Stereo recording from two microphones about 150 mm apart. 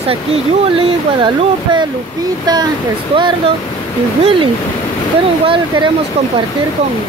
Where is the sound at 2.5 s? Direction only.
25° right (ahead or behind).